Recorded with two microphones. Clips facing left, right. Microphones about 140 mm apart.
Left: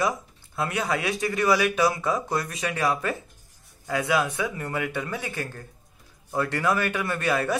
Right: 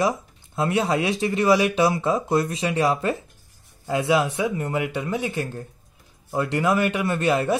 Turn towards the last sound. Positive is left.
turn(degrees=-25)  # may be behind; listen again after turning